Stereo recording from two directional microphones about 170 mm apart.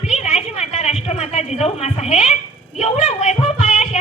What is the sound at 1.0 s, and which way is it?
Speech, 40° left (ahead or behind).